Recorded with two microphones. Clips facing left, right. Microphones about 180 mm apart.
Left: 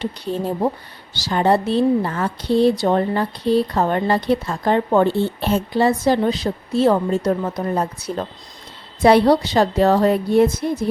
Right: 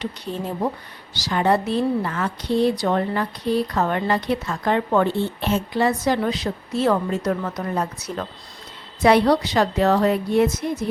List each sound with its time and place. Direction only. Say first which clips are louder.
0.0 s a woman's voice: left 5 dB; 30° left (ahead or behind)